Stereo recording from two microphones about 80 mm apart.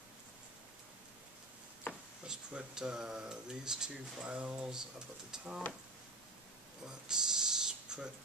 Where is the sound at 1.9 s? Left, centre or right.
Left.